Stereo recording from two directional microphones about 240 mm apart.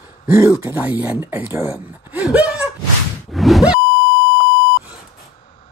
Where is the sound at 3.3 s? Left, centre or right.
Centre.